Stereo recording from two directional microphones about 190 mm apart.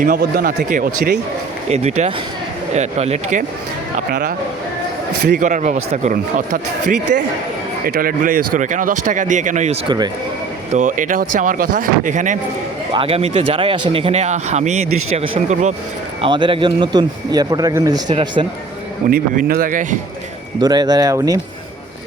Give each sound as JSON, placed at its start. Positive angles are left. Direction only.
{"t": 0.0, "sound": "speech", "side_deg": -50}
{"t": 1.7, "sound": "speech", "side_deg": -35}
{"t": 5.4, "sound": "speech", "side_deg": -40}
{"t": 12.9, "sound": "a man's voice", "side_deg": -30}
{"t": 19.1, "sound": "speech", "side_deg": -50}
{"t": 20.6, "sound": "a man's voice", "side_deg": -20}